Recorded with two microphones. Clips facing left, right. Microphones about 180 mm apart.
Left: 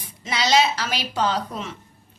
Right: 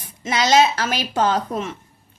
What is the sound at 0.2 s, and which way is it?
A woman's voice, 50° right (ahead or behind).